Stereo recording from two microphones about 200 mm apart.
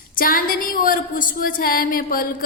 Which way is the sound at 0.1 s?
45° left (ahead or behind).